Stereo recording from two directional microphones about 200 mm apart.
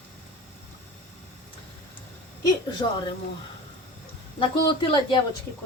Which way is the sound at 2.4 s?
20° left (ahead or behind).